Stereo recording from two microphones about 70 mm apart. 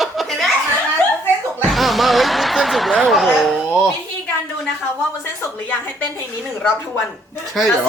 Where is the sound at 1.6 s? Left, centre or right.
Centre.